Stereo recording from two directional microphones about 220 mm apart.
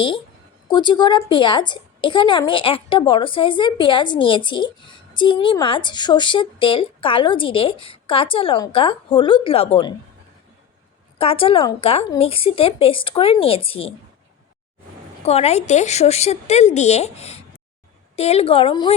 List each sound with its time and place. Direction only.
0.7 s a woman's voice: 20° left (ahead or behind)
11.2 s a woman's voice: 25° left (ahead or behind)
15.2 s a woman's voice: 30° left (ahead or behind)